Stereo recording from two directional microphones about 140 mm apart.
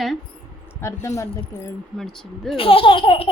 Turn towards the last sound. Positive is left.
turn(degrees=40)  # may be behind; listen again after turning